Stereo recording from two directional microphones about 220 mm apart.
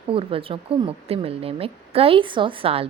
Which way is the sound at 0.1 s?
25° right (ahead or behind).